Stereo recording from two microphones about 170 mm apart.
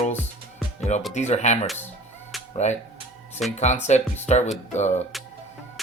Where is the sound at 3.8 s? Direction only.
40° left (ahead or behind).